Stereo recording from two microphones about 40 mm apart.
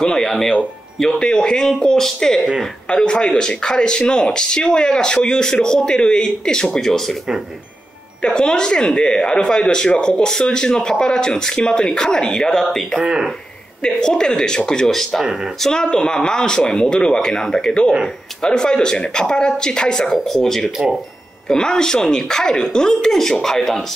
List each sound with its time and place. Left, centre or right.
0.0 s speech: centre
8.2 s speech: left
13.0 s speech: centre
13.8 s speech: centre
14.9 s speech: centre
15.6 s speech: centre
20.1 s speech: centre